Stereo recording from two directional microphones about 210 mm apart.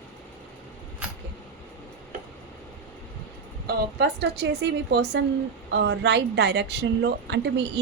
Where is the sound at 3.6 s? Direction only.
50° right (ahead or behind).